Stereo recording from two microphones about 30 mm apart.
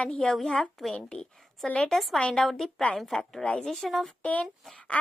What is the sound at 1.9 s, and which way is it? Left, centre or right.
A woman's voice, centre.